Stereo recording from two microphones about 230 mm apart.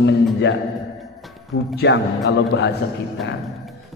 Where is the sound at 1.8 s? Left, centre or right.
Left.